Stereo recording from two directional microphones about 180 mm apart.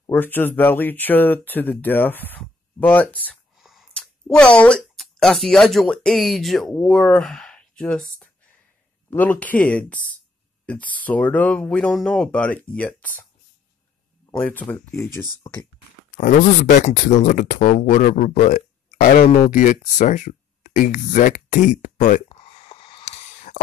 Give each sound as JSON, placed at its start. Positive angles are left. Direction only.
{"t": 0.0, "sound": "speech", "side_deg": 10}
{"t": 14.3, "sound": "speech", "side_deg": 10}
{"t": 16.1, "sound": "a sound", "side_deg": 45}
{"t": 16.8, "sound": "speech", "side_deg": 45}